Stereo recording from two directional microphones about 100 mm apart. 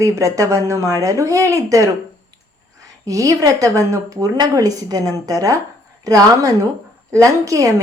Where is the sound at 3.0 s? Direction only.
35° right (ahead or behind).